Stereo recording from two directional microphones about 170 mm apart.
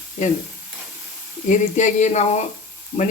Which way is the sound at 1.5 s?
45° left (ahead or behind).